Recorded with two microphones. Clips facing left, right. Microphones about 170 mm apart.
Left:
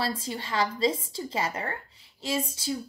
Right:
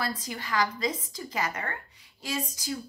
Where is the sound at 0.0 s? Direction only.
30° left (ahead or behind).